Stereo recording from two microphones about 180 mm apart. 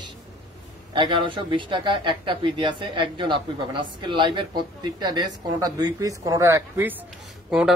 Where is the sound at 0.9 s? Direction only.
25° right (ahead or behind).